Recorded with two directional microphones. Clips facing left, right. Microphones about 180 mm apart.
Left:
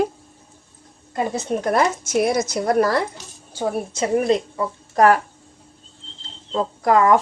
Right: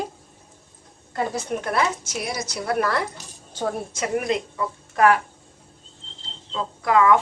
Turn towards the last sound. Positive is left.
turn(degrees=45)  # may be behind; listen again after turning